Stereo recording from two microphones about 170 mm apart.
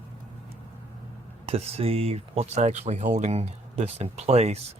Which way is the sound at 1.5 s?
35° right (ahead or behind).